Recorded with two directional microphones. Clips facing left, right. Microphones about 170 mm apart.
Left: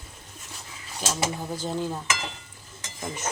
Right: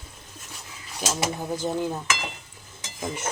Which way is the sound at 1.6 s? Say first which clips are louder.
Right 2 dB; 15° right (ahead or behind).